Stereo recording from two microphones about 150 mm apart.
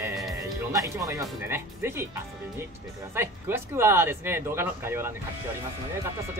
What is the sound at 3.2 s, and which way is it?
Speech, 15° right (ahead or behind).